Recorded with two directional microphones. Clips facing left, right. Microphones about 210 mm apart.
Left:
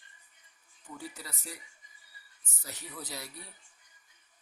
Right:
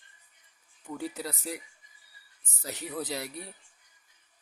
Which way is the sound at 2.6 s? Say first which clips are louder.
Right 9 dB; 65° right (ahead or behind).